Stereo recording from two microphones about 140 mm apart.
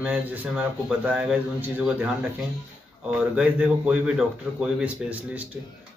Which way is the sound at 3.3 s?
10° right (ahead or behind).